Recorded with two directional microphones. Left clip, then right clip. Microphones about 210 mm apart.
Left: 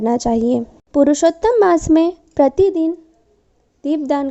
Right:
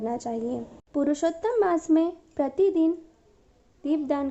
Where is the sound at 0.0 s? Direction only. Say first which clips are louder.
Left 13 dB; 40° left (ahead or behind).